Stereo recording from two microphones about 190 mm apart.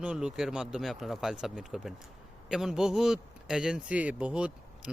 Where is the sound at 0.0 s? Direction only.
5° right (ahead or behind).